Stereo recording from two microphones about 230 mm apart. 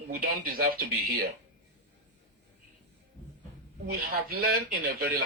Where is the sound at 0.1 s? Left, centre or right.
Right.